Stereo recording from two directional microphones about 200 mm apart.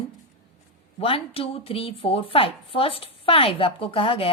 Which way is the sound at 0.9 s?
25° left (ahead or behind).